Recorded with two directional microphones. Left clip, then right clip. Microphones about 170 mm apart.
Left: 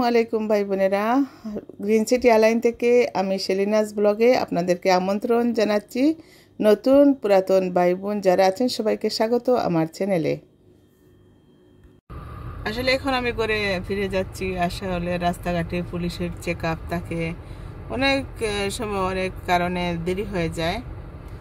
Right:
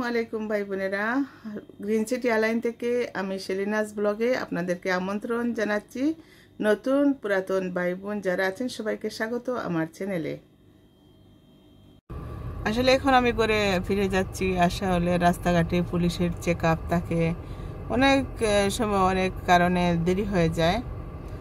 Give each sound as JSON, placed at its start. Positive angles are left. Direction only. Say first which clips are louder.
{"t": 0.0, "sound": "speech", "louder": "left 8 dB", "side_deg": 35}
{"t": 1.9, "sound": "speech", "louder": "left 7 dB", "side_deg": -20}
{"t": 2.2, "sound": "speech", "louder": "left 9 dB", "side_deg": 25}
{"t": 2.5, "sound": "speech", "louder": "left 8 dB", "side_deg": -20}
{"t": 3.0, "sound": "speech", "louder": "left 8 dB", "side_deg": 25}
{"t": 7.0, "sound": "speech", "louder": "left 8 dB", "side_deg": 15}
{"t": 7.2, "sound": "speech", "louder": "left 8 dB", "side_deg": 30}
{"t": 12.6, "sound": "speech", "louder": "right 1 dB", "side_deg": -10}
{"t": 13.6, "sound": "speech", "louder": "even", "side_deg": -25}